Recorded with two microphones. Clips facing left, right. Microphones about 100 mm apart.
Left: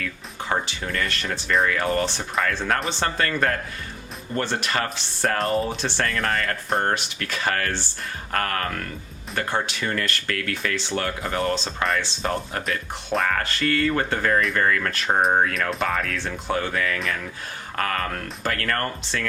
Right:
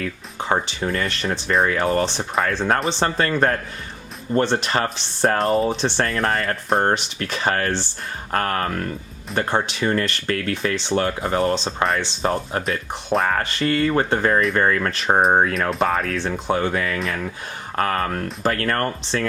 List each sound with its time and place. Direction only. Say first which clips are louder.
0.0 s speech: right 4 dB; 25° right (ahead or behind)
16.1 s speech: right 4 dB; 20° right (ahead or behind)